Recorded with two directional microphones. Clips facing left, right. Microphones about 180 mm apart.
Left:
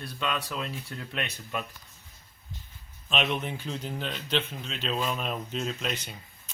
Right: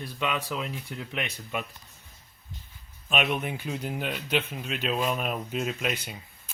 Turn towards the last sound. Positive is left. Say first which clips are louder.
# right 2 dB
turn(degrees=-10)  # may be behind; listen again after turning